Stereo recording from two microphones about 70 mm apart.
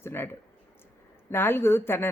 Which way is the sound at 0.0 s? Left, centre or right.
Left.